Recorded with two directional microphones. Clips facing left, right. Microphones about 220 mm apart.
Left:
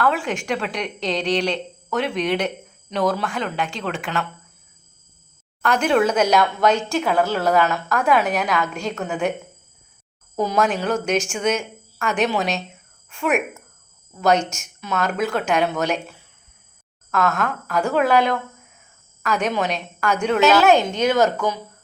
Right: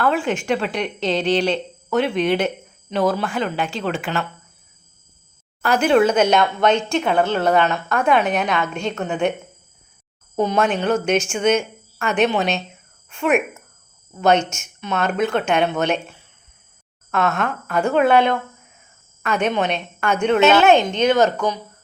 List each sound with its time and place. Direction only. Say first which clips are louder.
0.0 s speech: right 2 dB; centre (ahead or behind)
5.6 s speech: right 3 dB; 5° right (ahead or behind)
10.3 s speech: right 2 dB; centre (ahead or behind)
17.1 s speech: right 1 dB; centre (ahead or behind)